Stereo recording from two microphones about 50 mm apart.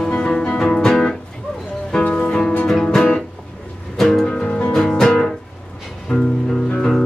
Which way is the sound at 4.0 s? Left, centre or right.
Centre.